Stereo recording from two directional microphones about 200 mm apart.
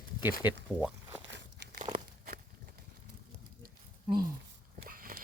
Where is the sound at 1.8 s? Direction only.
35° right (ahead or behind).